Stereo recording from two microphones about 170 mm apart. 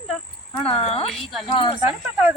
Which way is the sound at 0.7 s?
35° left (ahead or behind).